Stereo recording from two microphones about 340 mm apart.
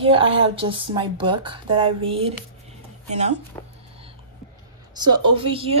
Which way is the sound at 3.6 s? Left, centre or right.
Centre.